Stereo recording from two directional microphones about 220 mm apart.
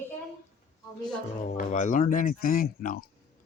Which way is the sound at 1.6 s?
35° left (ahead or behind).